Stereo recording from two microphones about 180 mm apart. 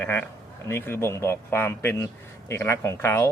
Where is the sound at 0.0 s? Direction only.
10° left (ahead or behind).